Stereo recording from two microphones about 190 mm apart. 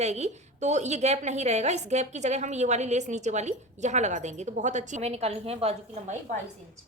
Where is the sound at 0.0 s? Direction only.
35° right (ahead or behind).